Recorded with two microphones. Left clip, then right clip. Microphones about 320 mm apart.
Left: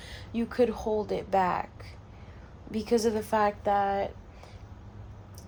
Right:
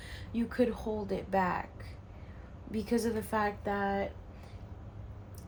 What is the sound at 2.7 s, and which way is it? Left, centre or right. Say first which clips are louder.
Speech: left 6 dB; left.